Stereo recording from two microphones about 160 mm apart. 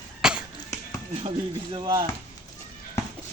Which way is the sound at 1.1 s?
35° right (ahead or behind).